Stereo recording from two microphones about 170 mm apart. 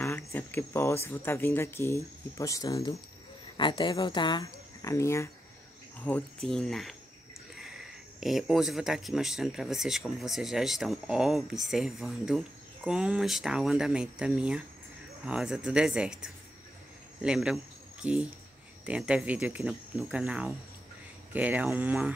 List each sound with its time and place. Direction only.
0.0 s speech: 10° left (ahead or behind); by 22.1 s 5° right (ahead or behind)